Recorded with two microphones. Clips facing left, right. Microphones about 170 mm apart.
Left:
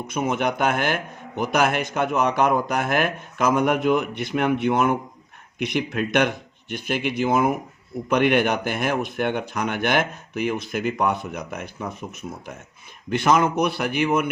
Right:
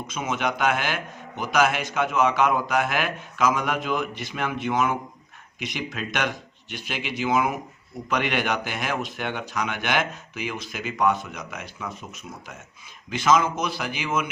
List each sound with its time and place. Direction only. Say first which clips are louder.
0.1 s a man's voice: left 4 dB; 55° left (ahead or behind)